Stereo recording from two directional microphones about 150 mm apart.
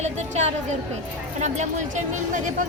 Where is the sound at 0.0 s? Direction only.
50° right (ahead or behind).